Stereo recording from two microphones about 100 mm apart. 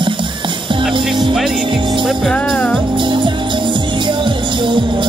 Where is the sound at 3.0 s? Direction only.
55° right (ahead or behind).